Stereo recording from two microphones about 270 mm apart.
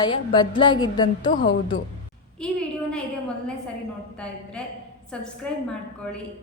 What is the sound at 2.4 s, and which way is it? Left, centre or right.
Speech, centre.